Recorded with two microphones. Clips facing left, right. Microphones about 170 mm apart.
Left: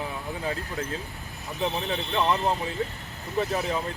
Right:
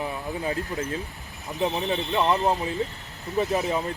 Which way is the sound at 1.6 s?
20° right (ahead or behind).